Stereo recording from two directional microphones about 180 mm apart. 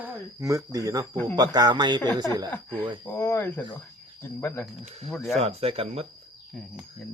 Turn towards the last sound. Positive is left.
turn(degrees=0)  # may be behind; listen again after turning